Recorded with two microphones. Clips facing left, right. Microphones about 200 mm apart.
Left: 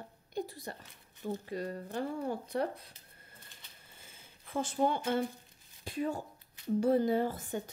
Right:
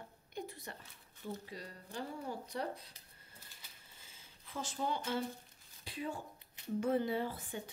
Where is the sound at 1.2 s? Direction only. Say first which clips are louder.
Left 8 dB; 50° left (ahead or behind).